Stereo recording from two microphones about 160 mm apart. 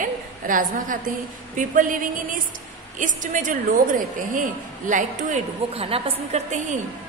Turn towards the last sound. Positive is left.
turn(degrees=-40)  # may be behind; listen again after turning